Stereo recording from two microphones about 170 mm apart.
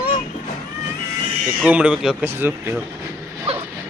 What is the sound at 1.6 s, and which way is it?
Chicken, 10° right (ahead or behind).